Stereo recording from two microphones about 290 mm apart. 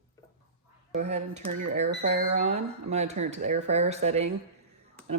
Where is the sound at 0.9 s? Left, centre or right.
Right.